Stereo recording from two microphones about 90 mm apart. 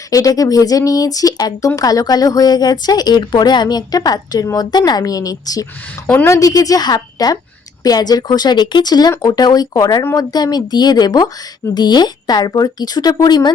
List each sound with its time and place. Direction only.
0.1 s a woman's voice: 40° left (ahead or behind)